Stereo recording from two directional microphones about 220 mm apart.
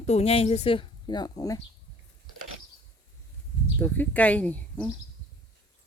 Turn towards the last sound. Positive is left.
turn(degrees=5)  # may be behind; listen again after turning